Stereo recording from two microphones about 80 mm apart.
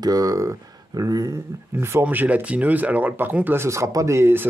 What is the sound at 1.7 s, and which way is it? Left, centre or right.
Speech, right.